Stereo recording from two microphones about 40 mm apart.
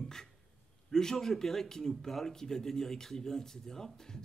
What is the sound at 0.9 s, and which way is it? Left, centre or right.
Speech, centre.